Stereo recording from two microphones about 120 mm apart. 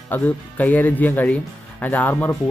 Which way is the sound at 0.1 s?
15° left (ahead or behind).